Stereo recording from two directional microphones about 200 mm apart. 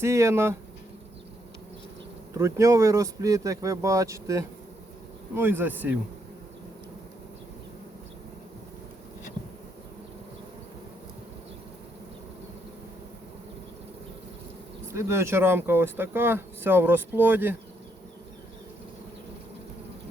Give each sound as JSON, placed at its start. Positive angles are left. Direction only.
{"t": 0.0, "sound": "speech", "side_deg": -15}
{"t": 2.4, "sound": "speech", "side_deg": -15}
{"t": 14.9, "sound": "speech", "side_deg": -15}